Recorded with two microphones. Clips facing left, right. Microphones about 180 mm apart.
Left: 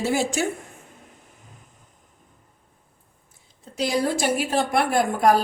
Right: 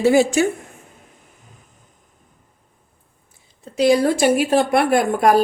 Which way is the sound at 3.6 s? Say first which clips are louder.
Right 8 dB; 65° right (ahead or behind).